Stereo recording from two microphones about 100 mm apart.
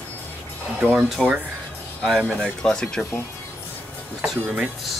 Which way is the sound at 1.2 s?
15° right (ahead or behind).